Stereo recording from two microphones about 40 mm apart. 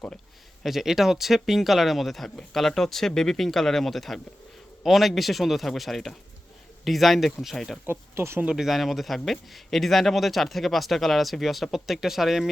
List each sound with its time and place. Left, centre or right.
0.6 s speech: centre
7.9 s speech: right
8.4 s speech: centre
8.7 s speech: centre